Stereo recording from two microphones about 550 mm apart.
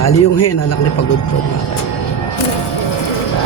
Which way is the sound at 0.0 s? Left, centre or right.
Left.